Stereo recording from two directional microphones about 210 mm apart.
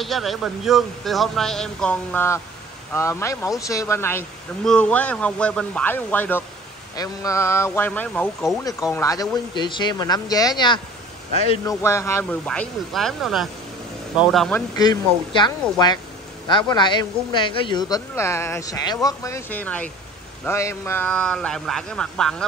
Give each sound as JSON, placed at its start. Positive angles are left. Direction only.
{"t": 0.0, "sound": "a man's voice", "side_deg": 0}
{"t": 14.8, "sound": "a man's voice", "side_deg": 20}